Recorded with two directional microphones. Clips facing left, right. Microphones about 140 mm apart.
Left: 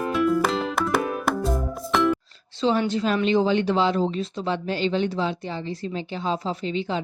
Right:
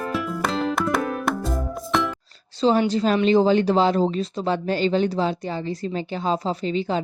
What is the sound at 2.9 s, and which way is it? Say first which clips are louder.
Speech: right 3 dB; 35° right (ahead or behind).